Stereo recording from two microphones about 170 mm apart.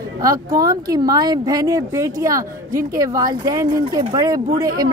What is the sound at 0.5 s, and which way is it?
A woman's voice, 20° right (ahead or behind).